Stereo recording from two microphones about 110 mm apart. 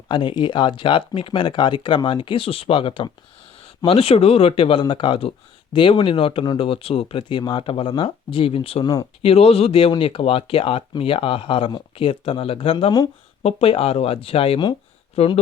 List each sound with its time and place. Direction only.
0.1 s speech: 50° left (ahead or behind)
6.7 s speech: 60° left (ahead or behind)
8.8 s speech: 35° left (ahead or behind)
9.2 s speech: 65° left (ahead or behind)